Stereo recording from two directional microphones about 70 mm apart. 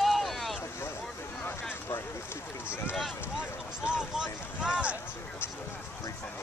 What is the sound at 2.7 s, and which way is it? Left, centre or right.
Speech, left.